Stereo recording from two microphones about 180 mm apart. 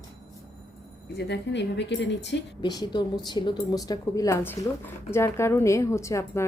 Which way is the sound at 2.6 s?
25° left (ahead or behind).